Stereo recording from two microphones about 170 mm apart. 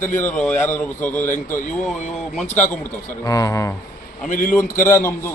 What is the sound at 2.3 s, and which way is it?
Speech, 5° left (ahead or behind).